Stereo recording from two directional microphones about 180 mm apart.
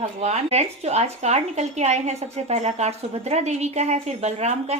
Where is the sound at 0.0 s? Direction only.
35° right (ahead or behind).